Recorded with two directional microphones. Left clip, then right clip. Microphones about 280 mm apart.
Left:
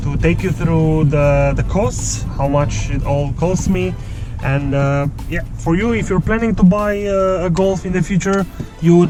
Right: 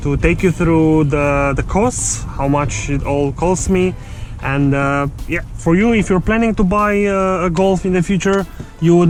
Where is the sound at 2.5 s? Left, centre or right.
Right.